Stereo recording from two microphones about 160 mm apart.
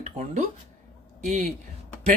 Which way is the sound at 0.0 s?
45° right (ahead or behind).